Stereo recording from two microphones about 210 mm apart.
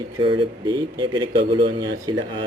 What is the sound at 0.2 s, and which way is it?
Speech, 25° right (ahead or behind).